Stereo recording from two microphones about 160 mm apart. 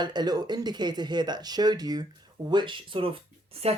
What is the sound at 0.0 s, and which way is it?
Speech, 25° right (ahead or behind).